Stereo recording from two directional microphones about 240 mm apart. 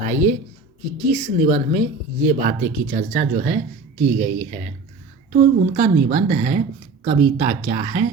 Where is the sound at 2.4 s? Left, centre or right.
Right.